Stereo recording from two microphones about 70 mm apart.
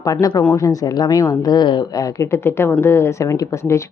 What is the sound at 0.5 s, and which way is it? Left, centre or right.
Speech, left.